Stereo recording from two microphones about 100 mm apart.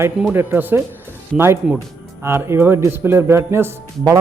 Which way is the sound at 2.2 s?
25° right (ahead or behind).